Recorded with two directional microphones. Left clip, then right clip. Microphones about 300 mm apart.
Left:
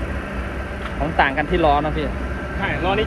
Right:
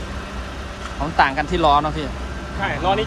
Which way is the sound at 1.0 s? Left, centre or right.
Centre.